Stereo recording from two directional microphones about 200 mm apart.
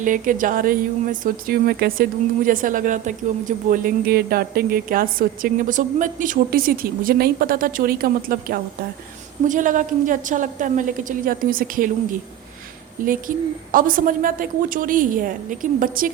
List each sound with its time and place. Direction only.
0.0 s a woman's voice: 40° right (ahead or behind)
13.1 s speech: 45° right (ahead or behind)